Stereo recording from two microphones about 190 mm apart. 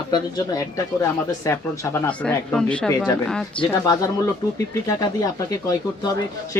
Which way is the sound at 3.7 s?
15° left (ahead or behind).